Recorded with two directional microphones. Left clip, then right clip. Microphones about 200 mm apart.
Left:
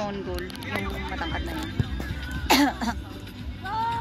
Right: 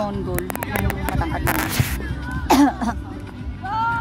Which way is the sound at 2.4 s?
40° right (ahead or behind).